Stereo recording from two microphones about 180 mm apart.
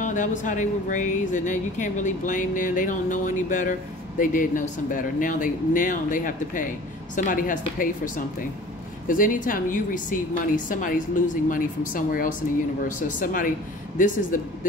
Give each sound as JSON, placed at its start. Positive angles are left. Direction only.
{"t": 0.0, "sound": "speech", "side_deg": 45}